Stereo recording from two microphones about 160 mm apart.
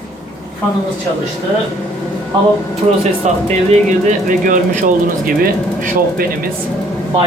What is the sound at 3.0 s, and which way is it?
Speech, 45° right (ahead or behind).